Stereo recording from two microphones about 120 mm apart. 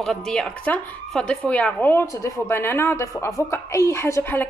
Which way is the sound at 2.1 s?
30° left (ahead or behind).